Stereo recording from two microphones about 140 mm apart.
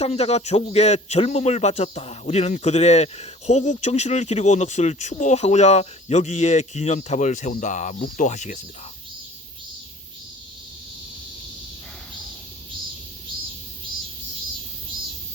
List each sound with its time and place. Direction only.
0.0 s a man's voice: 50° left (ahead or behind)